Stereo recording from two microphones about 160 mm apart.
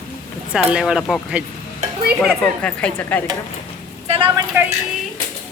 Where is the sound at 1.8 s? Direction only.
45° right (ahead or behind).